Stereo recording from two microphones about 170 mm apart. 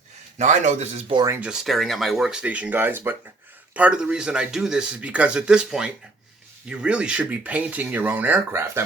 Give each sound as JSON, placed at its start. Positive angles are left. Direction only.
{"t": 0.3, "sound": "speech", "side_deg": -45}
{"t": 1.1, "sound": "speech", "side_deg": -20}
{"t": 1.4, "sound": "speech", "side_deg": -5}